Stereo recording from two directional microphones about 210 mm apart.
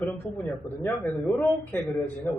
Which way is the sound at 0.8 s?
10° left (ahead or behind).